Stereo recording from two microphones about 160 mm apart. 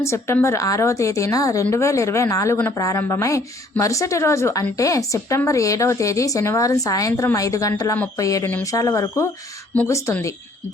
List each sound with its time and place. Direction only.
0.0 s speech: 15° left (ahead or behind)